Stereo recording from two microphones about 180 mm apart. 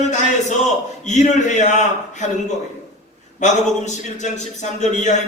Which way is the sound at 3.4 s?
40° left (ahead or behind).